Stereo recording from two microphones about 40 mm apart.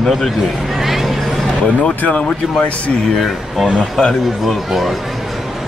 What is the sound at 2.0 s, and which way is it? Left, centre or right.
Speech, left.